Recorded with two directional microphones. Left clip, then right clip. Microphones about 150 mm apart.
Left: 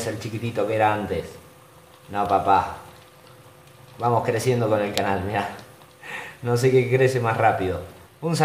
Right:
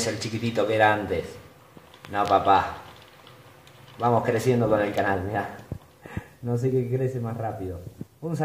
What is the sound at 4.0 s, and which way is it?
Speech, 20° right (ahead or behind).